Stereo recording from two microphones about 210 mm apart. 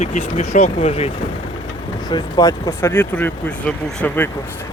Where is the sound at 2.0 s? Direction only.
20° left (ahead or behind).